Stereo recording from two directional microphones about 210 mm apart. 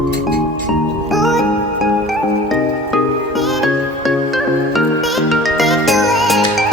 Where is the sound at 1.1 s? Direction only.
Centre (ahead or behind).